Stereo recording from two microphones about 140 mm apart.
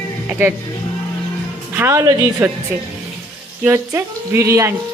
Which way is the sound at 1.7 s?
20° right (ahead or behind).